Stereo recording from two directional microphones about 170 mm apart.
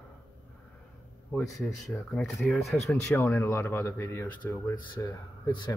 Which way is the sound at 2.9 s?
10° left (ahead or behind).